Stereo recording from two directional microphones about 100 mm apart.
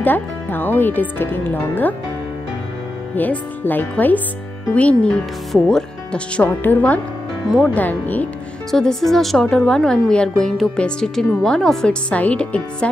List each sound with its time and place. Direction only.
0.0 s speech: 20° left (ahead or behind)
3.2 s a woman's voice: 20° left (ahead or behind)
8.7 s a woman's voice: 5° left (ahead or behind)